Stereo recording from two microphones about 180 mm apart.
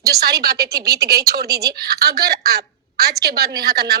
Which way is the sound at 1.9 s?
60° right (ahead or behind).